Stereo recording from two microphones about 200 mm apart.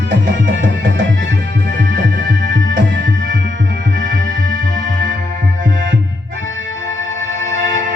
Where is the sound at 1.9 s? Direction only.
60° right (ahead or behind).